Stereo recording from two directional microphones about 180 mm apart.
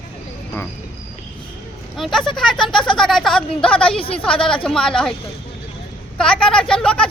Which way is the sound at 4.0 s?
30° left (ahead or behind).